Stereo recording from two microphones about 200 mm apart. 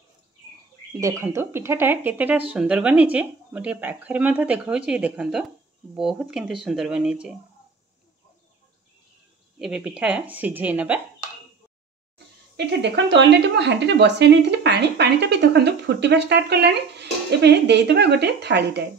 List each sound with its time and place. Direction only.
1.0 s speech: 15° right (ahead or behind)
9.6 s speech: 5° right (ahead or behind)
12.5 s speech: 60° right (ahead or behind)